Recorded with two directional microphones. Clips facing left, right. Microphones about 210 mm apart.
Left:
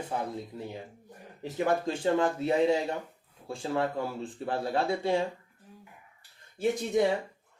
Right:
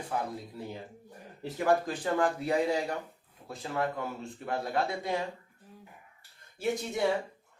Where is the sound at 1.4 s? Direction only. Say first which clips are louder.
Even; 25° left (ahead or behind).